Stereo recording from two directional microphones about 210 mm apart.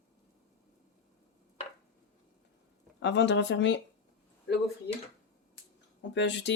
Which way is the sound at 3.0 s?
60° left (ahead or behind).